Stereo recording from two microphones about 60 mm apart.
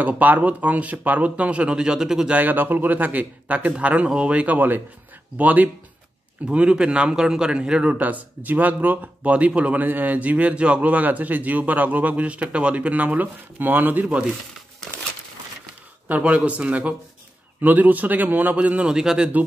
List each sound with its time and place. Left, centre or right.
0.0 s speech: right; by 2.3 s centre
2.3 s speech: right
14.0 s speech: centre
16.1 s speech: right
18.9 s speech: centre